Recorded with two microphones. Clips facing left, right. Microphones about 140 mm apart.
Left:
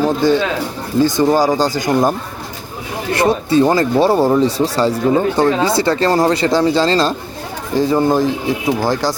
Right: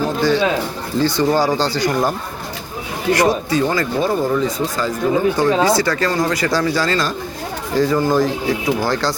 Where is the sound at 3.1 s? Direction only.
25° left (ahead or behind).